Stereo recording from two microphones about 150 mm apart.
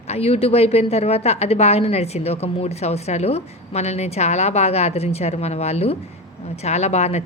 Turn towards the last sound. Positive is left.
turn(degrees=45)  # may be behind; listen again after turning